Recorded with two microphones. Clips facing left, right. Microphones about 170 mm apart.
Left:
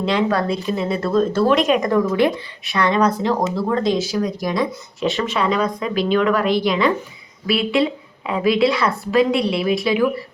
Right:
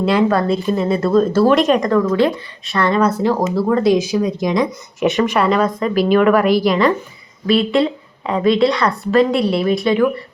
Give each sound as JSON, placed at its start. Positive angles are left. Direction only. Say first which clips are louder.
{"t": 0.0, "sound": "speech", "louder": "right 4 dB", "side_deg": -5}
{"t": 2.7, "sound": "speech", "louder": "right 2 dB", "side_deg": 0}
{"t": 5.4, "sound": "speech", "louder": "right 2 dB", "side_deg": 0}